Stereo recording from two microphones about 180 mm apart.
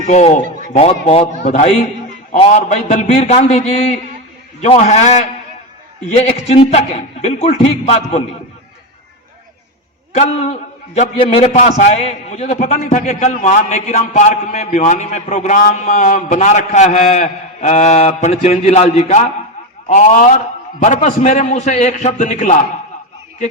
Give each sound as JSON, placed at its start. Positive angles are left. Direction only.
{"t": 0.0, "sound": "a man's voice", "side_deg": 40}
{"t": 4.6, "sound": "a man's voice", "side_deg": 40}
{"t": 6.2, "sound": "a man's voice", "side_deg": 35}
{"t": 10.2, "sound": "a man's voice", "side_deg": 40}